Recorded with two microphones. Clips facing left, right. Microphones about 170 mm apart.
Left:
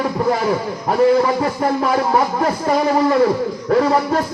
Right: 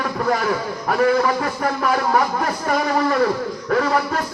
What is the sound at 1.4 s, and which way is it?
Speech, 25° left (ahead or behind).